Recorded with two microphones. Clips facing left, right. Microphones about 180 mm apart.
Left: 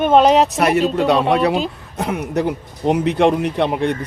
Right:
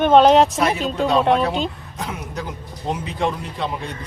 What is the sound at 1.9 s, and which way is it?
Speech, 65° left (ahead or behind).